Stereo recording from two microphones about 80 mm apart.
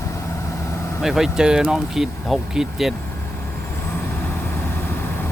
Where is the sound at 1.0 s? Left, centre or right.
Centre.